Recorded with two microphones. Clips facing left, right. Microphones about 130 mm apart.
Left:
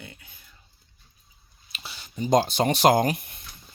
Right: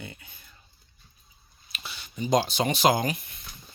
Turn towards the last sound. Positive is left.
turn(degrees=55)  # may be behind; listen again after turning